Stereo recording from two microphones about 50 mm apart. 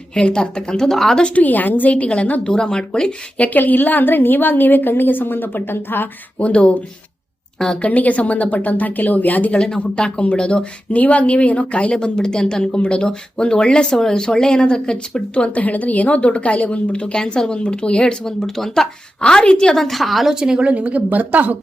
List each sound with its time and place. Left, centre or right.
0.1 s speech: left
1.2 s a woman's voice: left
2.5 s a woman's voice: centre; by 6.1 s left
6.4 s a woman's voice: left
7.8 s a woman's voice: left
9.6 s speech: centre
15.5 s a woman's voice: left; by 18.9 s centre
19.2 s speech: centre
19.7 s a woman's voice: centre
20.3 s speech: centre; by 21.6 s right